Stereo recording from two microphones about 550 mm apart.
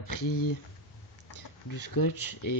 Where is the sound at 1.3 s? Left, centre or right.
Left.